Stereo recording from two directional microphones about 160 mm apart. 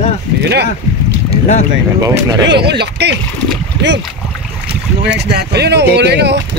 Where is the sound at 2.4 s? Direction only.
90° right.